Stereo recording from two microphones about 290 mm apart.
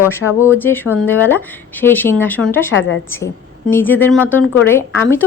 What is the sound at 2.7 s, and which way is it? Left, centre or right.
Speech, left.